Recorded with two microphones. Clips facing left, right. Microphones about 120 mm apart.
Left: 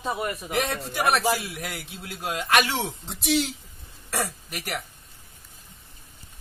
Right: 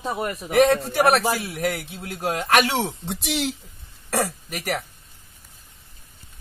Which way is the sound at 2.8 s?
70° right (ahead or behind).